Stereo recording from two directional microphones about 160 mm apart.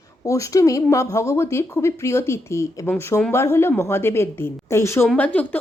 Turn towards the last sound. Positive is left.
turn(degrees=10)  # may be behind; listen again after turning